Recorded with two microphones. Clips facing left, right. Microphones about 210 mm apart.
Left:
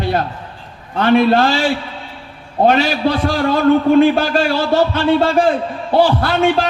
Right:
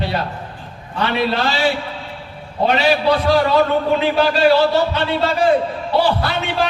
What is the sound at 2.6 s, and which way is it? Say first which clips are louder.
A man's voice: left 3 dB; 50° left (ahead or behind).